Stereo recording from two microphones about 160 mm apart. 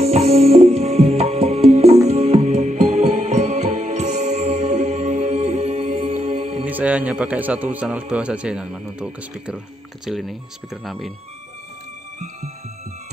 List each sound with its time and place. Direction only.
0.0 s music: 40° right (ahead or behind)
6.6 s a man's voice: 10° right (ahead or behind)